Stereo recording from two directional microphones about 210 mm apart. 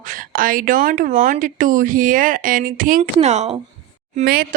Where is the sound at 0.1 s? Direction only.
40° right (ahead or behind).